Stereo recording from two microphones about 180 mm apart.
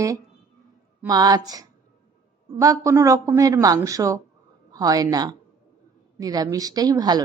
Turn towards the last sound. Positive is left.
turn(degrees=-20)  # may be behind; listen again after turning